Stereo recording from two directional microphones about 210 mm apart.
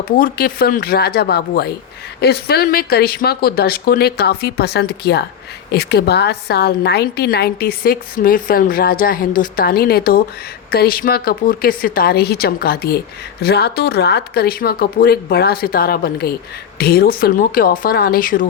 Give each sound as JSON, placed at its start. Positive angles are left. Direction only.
{"t": 0.2, "sound": "a woman's voice", "side_deg": 45}